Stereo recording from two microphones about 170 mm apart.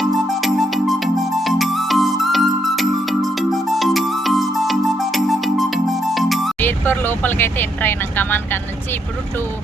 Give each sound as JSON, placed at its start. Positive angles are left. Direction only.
{"t": 0.0, "sound": "music", "side_deg": 0}
{"t": 6.6, "sound": "speech", "side_deg": 10}